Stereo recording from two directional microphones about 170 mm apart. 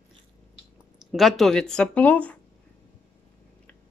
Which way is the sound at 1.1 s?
Centre (ahead or behind).